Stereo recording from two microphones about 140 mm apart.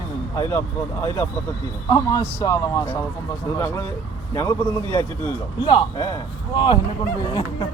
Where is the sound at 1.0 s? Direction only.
15° left (ahead or behind).